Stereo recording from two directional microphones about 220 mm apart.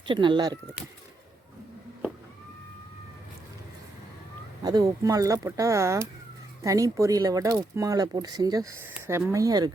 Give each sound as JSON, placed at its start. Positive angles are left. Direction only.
{"t": 0.1, "sound": "speech", "side_deg": -20}
{"t": 4.6, "sound": "speech", "side_deg": -15}